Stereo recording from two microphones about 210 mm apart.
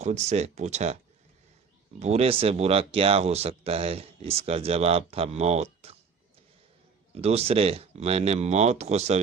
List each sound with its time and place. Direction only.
0.0 s speech: 35° right (ahead or behind)
2.0 s speech: 30° right (ahead or behind)
7.1 s speech: 30° right (ahead or behind)